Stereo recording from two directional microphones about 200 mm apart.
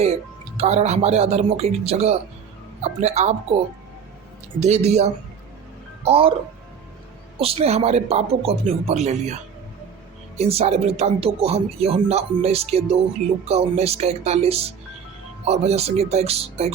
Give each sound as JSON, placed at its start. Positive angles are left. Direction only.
{"t": 0.0, "sound": "speech", "side_deg": -30}
{"t": 4.6, "sound": "speech", "side_deg": -35}
{"t": 7.3, "sound": "speech", "side_deg": -30}